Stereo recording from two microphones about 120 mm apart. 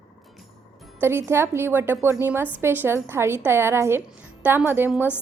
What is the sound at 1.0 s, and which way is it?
A woman's voice, 20° right (ahead or behind).